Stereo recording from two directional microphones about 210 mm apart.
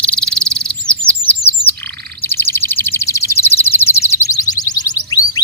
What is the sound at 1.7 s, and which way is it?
Bird, 50° right (ahead or behind).